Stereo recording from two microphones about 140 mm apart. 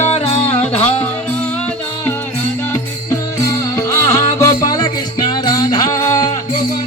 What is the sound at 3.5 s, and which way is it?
Music, 20° left (ahead or behind).